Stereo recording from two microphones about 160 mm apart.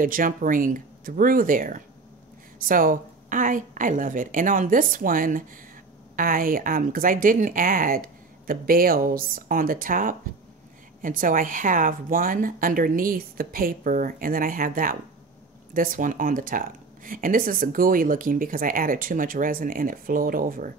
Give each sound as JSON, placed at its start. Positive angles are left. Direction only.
{"t": 0.0, "sound": "speech", "side_deg": -60}